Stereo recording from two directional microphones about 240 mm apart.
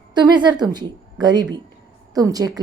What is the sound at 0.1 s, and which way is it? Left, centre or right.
A woman's voice, centre.